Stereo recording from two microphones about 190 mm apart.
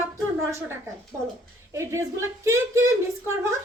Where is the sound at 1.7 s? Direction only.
15° right (ahead or behind).